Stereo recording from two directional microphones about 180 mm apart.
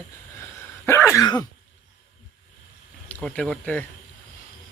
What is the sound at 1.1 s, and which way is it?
Cough, 20° left (ahead or behind).